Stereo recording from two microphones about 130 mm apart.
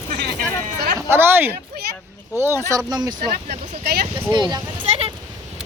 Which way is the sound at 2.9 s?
30° right (ahead or behind).